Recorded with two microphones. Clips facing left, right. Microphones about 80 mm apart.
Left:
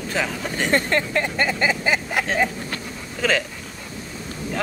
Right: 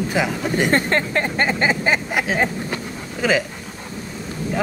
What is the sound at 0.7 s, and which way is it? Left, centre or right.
Vehicle, right.